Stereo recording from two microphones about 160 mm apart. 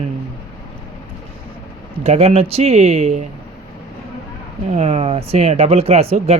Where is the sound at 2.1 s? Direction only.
40° right (ahead or behind).